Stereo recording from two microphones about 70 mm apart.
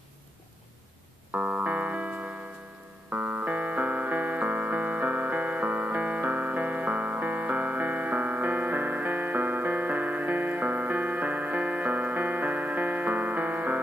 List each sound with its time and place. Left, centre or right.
1.3 s music: right